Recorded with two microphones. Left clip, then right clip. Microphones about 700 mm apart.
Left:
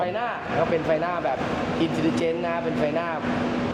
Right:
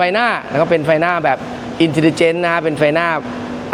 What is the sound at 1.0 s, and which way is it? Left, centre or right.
Speech, right.